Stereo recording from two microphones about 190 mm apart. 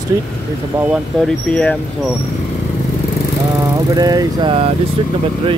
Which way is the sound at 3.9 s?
20° right (ahead or behind).